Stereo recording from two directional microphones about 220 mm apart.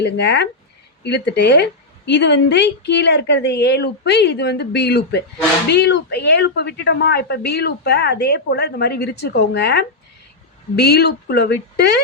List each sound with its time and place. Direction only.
0.0 s a woman's voice: 50° left (ahead or behind)